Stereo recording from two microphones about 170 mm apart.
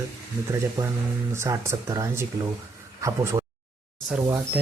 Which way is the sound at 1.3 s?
15° right (ahead or behind).